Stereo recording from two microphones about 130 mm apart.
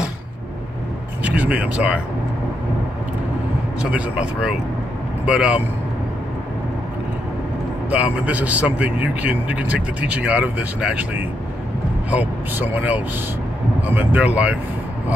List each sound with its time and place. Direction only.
1.2 s speech: 10° right (ahead or behind)
3.9 s a man's voice: 10° right (ahead or behind)
7.9 s a man's voice: 10° right (ahead or behind)